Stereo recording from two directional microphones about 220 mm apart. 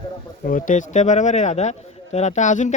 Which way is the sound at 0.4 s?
35° left (ahead or behind).